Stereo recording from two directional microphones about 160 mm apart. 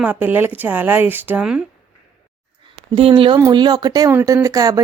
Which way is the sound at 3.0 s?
35° right (ahead or behind).